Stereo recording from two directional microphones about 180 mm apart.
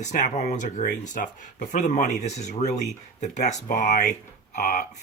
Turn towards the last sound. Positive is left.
turn(degrees=45)  # may be behind; listen again after turning